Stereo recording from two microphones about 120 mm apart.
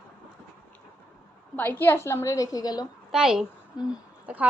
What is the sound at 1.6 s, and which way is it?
A woman's voice, 15° left (ahead or behind).